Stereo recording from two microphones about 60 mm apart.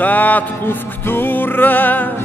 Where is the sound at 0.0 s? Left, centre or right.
Left.